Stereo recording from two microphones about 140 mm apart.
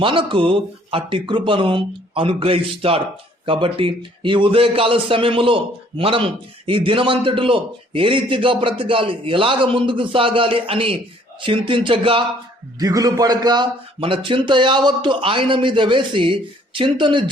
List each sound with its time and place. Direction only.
0.0 s a man's voice: 35° right (ahead or behind)
12.8 s a man's voice: 25° right (ahead or behind)